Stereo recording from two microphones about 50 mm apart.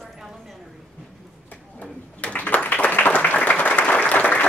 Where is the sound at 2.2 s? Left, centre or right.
Left.